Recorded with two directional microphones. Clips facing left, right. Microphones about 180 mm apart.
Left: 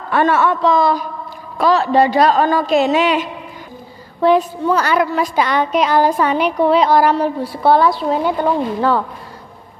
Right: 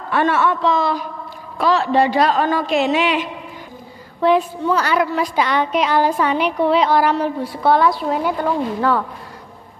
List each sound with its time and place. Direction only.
0.1 s a woman's voice: 45° left (ahead or behind); by 9.0 s 25° left (ahead or behind)